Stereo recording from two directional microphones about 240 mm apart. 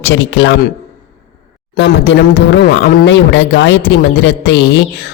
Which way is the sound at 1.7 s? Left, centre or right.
Left.